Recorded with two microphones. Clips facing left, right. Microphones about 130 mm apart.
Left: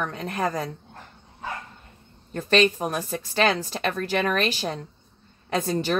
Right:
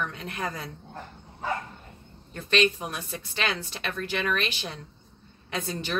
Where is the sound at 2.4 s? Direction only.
40° left (ahead or behind).